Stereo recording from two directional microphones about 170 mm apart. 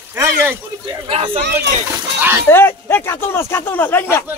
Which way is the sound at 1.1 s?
35° right (ahead or behind).